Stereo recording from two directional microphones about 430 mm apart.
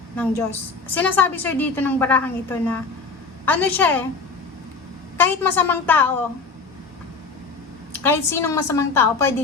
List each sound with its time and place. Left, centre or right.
0.9 s a woman's voice: centre
5.1 s a woman's voice: centre
8.0 s a woman's voice: centre